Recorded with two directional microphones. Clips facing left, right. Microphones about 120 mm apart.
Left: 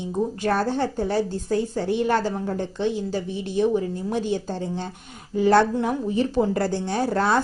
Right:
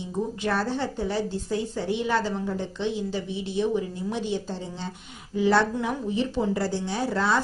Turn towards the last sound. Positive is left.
turn(degrees=50)  # may be behind; listen again after turning